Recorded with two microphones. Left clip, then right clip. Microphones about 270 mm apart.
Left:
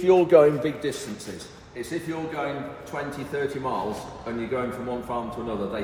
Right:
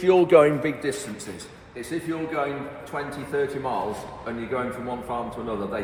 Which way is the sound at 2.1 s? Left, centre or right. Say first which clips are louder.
Right 4 dB; centre.